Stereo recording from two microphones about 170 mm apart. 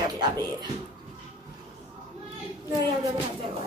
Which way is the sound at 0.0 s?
25° right (ahead or behind).